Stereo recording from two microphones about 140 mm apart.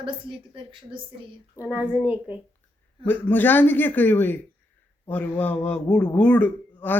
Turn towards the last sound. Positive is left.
turn(degrees=10)  # may be behind; listen again after turning